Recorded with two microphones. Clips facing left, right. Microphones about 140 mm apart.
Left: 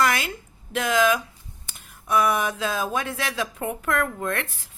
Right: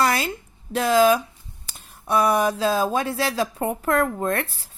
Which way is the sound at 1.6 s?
35° right (ahead or behind).